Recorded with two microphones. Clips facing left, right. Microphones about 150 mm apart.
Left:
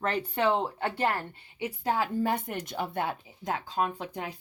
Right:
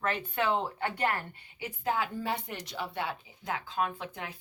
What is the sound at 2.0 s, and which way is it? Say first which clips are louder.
Speech: left 5 dB; 45° left (ahead or behind).